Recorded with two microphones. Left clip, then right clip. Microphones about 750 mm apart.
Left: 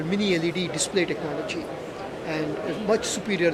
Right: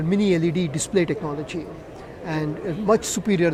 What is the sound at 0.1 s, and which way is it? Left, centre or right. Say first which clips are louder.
Speech: right 4 dB; right.